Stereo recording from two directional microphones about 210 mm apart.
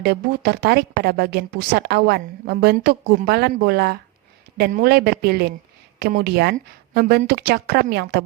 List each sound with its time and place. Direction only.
0.0 s speech: 50° right (ahead or behind)